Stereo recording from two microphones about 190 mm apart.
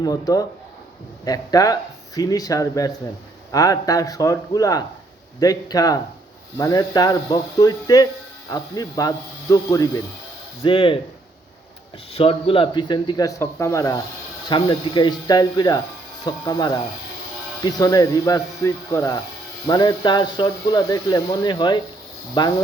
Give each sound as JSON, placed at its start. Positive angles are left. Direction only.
{"t": 0.0, "sound": "speech", "side_deg": 20}
{"t": 12.1, "sound": "speech", "side_deg": 30}